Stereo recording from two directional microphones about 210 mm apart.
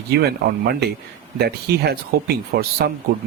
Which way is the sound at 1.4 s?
50° right (ahead or behind).